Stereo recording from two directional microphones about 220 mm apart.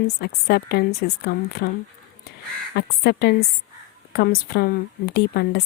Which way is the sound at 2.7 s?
45° left (ahead or behind).